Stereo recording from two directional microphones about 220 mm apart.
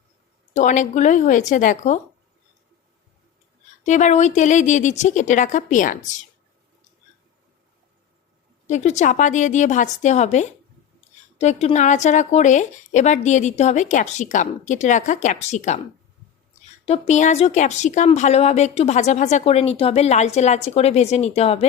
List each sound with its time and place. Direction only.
0.5 s a woman's voice: 35° left (ahead or behind)
3.8 s a woman's voice: 35° left (ahead or behind)
8.6 s a woman's voice: 30° left (ahead or behind)
16.8 s a woman's voice: 30° left (ahead or behind)